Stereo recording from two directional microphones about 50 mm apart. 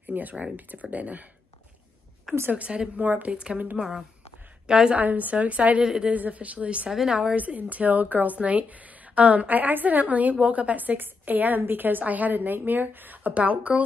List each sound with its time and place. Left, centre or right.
0.0 s a woman's voice: right
2.5 s a woman's voice: right
3.0 s a woman's voice: right
3.3 s a woman's voice: centre
3.8 s a woman's voice: right
4.6 s a woman's voice: centre
4.9 s a woman's voice: right
5.8 s a woman's voice: centre
6.1 s a woman's voice: right
6.9 s a woman's voice: centre
7.3 s a woman's voice: right